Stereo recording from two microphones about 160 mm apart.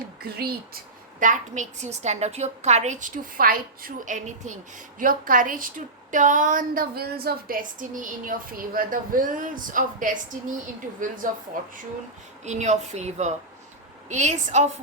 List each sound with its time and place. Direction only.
0.2 s speech: 75° right (ahead or behind)
1.2 s a woman's voice: 50° right (ahead or behind)
12.5 s a woman's voice: 45° right (ahead or behind)